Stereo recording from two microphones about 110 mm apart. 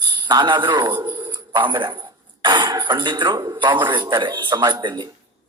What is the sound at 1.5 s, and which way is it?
A man's voice, 50° right (ahead or behind).